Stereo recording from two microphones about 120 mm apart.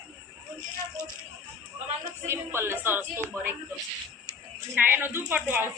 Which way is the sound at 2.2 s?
20° right (ahead or behind).